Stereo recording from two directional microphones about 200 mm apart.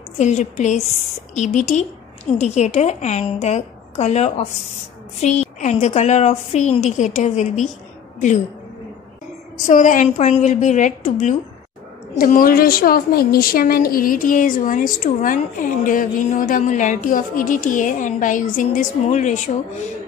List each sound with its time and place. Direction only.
0.2 s a woman's voice: 35° left (ahead or behind)
9.7 s a woman's voice: 40° left (ahead or behind)